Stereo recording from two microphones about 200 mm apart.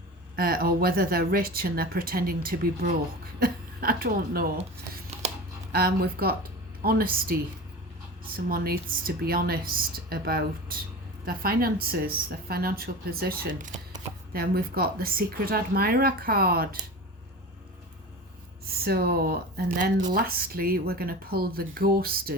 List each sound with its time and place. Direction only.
0.3 s speech: 50° right (ahead or behind)
5.7 s speech: 50° right (ahead or behind)
8.4 s speech: 45° right (ahead or behind)
18.6 s speech: 50° right (ahead or behind)